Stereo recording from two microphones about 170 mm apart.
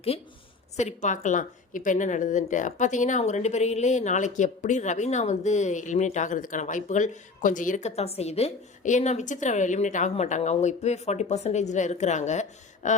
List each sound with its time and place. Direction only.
0.8 s a woman's voice: 45° left (ahead or behind)